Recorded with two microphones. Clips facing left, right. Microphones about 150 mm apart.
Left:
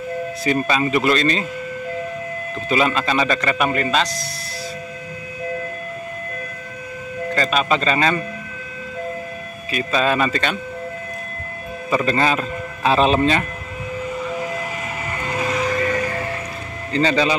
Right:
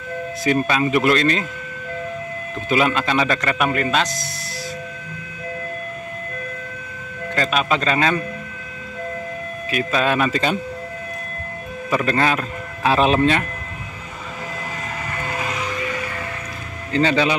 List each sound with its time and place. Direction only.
0.5 s a man's voice: 5° right (ahead or behind)
2.7 s a man's voice: 5° right (ahead or behind)
7.3 s a man's voice: centre (ahead or behind)
9.8 s a man's voice: 5° right (ahead or behind)
11.9 s a man's voice: centre (ahead or behind)
15.4 s music: 45° left (ahead or behind)
16.9 s a man's voice: 5° right (ahead or behind)